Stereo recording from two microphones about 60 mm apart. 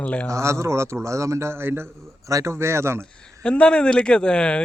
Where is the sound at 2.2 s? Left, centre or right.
Right.